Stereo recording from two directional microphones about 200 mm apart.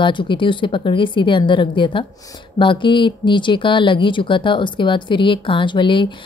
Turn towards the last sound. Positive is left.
turn(degrees=25)  # may be behind; listen again after turning